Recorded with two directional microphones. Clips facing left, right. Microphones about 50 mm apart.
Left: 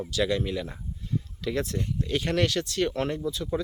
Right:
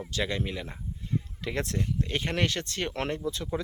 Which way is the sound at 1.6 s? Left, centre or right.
Right.